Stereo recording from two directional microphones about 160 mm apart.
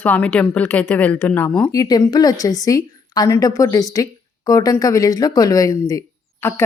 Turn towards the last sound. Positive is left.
turn(degrees=20)  # may be behind; listen again after turning